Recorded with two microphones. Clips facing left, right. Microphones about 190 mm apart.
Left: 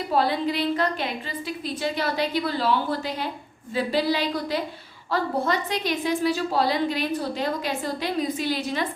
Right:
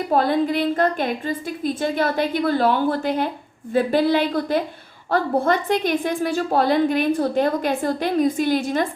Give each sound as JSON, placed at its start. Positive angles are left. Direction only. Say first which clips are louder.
{"t": 0.1, "sound": "a woman's voice", "louder": "right 4 dB", "side_deg": -50}